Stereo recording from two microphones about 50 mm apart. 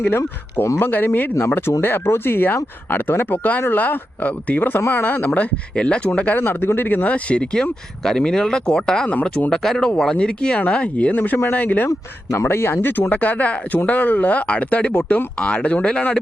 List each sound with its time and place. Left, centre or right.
0.8 s speech: left
1.4 s speech: left
5.2 s speech: left
5.7 s speech: left
6.4 s speech: left
7.1 s speech: left
12.5 s speech: left